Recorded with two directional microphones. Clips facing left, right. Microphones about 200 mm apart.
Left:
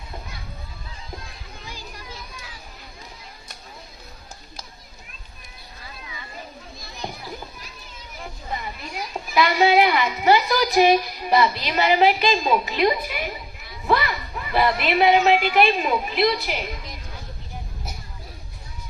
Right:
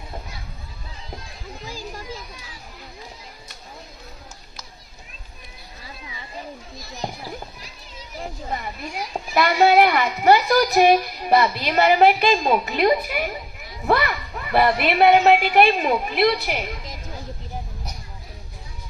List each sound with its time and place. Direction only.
9.3 s a child's voice: 50° right (ahead or behind)
13.8 s children playing: 55° right (ahead or behind)
14.5 s a child's voice: 55° right (ahead or behind)